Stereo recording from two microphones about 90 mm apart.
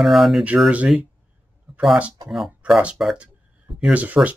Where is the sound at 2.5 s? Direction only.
15° right (ahead or behind).